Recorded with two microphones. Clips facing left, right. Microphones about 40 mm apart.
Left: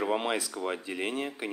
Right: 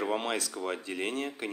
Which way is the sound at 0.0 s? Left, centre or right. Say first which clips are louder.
Left 2 dB; centre.